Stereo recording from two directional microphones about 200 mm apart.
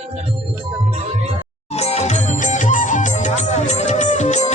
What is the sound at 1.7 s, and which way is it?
Music, 35° left (ahead or behind).